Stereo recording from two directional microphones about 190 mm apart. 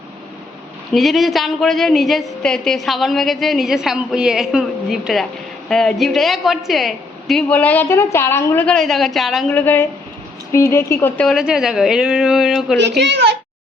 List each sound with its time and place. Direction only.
0.9 s a woman's voice: centre (ahead or behind)
13.0 s a child's voice: 60° right (ahead or behind)